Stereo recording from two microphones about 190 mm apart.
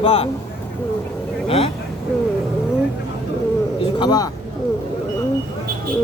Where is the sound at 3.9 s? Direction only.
20° left (ahead or behind).